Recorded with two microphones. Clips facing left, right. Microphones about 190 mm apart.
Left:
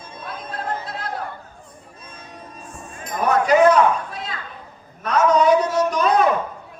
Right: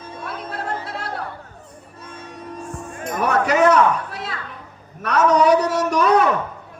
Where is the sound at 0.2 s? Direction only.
75° right (ahead or behind).